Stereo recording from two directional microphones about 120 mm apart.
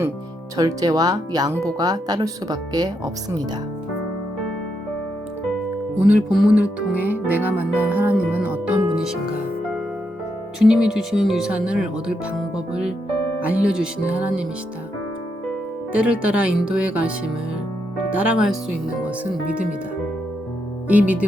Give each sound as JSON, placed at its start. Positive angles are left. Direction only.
{"t": 0.5, "sound": "speech", "side_deg": -30}
{"t": 6.1, "sound": "speech", "side_deg": -5}
{"t": 10.6, "sound": "speech", "side_deg": -5}
{"t": 15.9, "sound": "speech", "side_deg": -10}
{"t": 20.8, "sound": "speech", "side_deg": -15}